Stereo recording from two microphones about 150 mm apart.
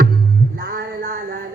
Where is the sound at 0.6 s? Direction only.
75° right (ahead or behind).